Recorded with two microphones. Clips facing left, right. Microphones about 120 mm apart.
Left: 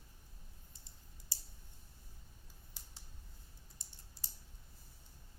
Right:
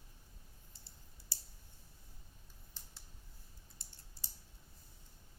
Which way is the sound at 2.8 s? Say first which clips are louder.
Right 1 dB; 10° left (ahead or behind).